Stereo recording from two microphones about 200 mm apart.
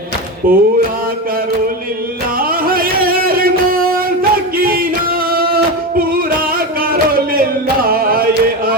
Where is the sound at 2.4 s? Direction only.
45° right (ahead or behind).